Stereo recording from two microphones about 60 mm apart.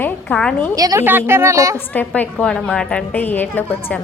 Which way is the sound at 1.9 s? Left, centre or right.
Left.